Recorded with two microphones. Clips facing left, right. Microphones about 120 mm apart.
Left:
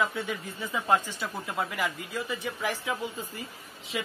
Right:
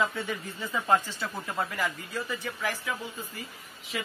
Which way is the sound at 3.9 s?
20° left (ahead or behind).